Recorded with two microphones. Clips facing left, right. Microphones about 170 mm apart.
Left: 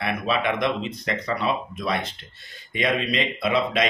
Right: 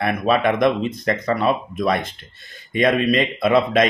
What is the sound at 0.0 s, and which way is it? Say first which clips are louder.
Speech: right 6 dB; 50° right (ahead or behind).